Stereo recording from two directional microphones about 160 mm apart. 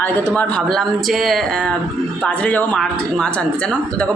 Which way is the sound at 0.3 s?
5° left (ahead or behind).